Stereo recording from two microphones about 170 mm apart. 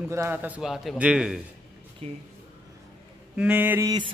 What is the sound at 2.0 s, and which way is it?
Speech, 35° right (ahead or behind).